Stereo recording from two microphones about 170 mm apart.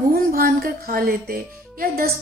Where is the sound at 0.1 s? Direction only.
60° right (ahead or behind).